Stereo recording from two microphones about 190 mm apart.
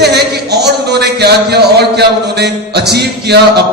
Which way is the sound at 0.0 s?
60° right (ahead or behind).